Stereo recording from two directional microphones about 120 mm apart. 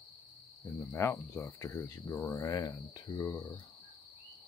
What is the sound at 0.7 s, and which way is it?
Speech, 25° left (ahead or behind).